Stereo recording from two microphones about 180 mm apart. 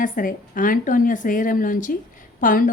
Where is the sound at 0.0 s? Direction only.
50° left (ahead or behind).